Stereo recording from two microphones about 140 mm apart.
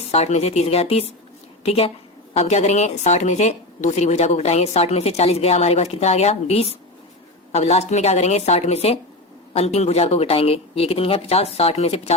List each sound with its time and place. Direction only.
0.0 s a woman's voice: 50° left (ahead or behind)